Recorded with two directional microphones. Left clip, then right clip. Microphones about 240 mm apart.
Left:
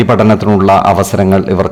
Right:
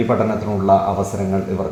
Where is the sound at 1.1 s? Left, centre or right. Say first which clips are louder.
Left 12 dB; left.